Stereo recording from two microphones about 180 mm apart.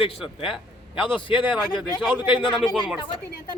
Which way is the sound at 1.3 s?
25° left (ahead or behind).